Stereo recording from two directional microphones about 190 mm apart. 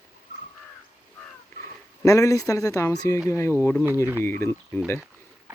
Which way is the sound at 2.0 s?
15° left (ahead or behind).